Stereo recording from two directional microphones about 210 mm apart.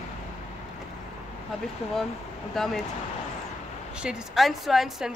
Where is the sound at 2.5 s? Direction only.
Centre (ahead or behind).